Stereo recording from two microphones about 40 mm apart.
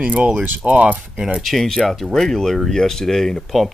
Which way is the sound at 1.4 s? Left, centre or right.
Centre.